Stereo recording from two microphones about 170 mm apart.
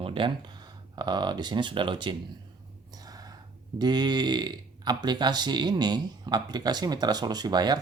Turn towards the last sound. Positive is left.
turn(degrees=-25)  # may be behind; listen again after turning